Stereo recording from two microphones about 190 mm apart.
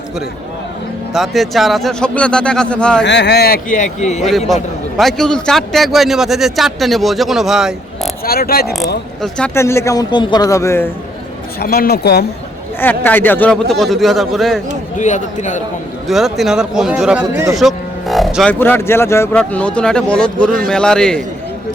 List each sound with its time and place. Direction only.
1.1 s a man's voice: centre (ahead or behind)
3.0 s speech: 65° left (ahead or behind); by 4.2 s 40° left (ahead or behind)
4.2 s a man's voice: centre (ahead or behind)
8.2 s speech: 50° left (ahead or behind)
9.6 s speech: 15° left (ahead or behind)
11.6 s speech: 55° left (ahead or behind)
12.8 s a man's voice: 10° left (ahead or behind)
14.9 s a man's voice: 40° left (ahead or behind)
16.0 s a man's voice: centre (ahead or behind)
17.6 s music: centre (ahead or behind)
18.6 s a man's voice: 10° left (ahead or behind)